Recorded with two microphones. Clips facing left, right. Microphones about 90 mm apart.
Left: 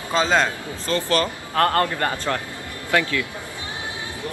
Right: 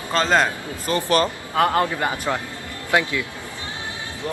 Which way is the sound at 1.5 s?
5° right (ahead or behind).